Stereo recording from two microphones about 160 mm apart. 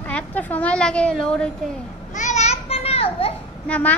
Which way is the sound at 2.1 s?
50° left (ahead or behind).